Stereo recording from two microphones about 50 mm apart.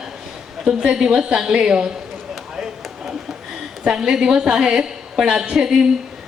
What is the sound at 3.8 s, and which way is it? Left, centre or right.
A woman's voice, centre.